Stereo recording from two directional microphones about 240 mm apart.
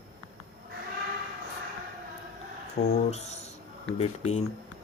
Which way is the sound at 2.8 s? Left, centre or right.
Left.